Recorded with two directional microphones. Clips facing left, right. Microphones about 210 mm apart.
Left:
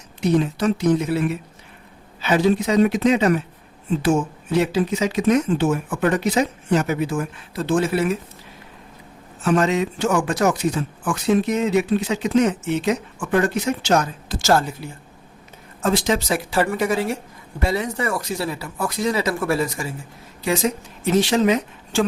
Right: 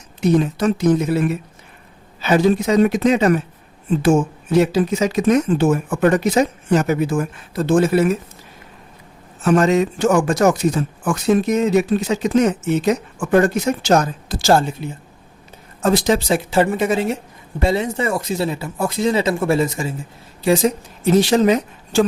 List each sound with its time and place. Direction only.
0.3 s speech: 45° right (ahead or behind)
4.5 s speech: 40° right (ahead or behind)
9.4 s speech: 45° right (ahead or behind); by 14.9 s 25° right (ahead or behind)
15.8 s speech: 40° right (ahead or behind); by 19.9 s 25° right (ahead or behind)
20.4 s speech: 35° right (ahead or behind)